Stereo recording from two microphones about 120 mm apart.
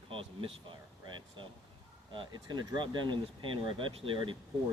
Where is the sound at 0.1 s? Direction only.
50° right (ahead or behind).